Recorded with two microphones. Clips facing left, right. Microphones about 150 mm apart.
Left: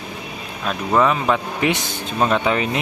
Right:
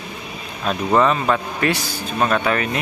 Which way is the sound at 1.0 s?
10° left (ahead or behind).